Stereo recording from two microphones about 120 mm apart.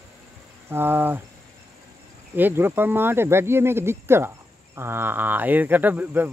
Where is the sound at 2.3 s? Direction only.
15° right (ahead or behind).